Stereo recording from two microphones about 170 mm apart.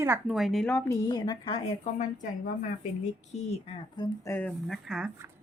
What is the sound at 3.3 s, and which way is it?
Speech, 40° left (ahead or behind).